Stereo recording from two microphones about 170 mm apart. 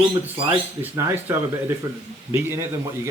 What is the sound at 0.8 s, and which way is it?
Speech, 15° right (ahead or behind).